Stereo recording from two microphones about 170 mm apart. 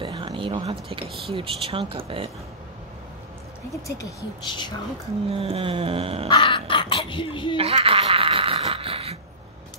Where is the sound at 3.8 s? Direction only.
25° left (ahead or behind).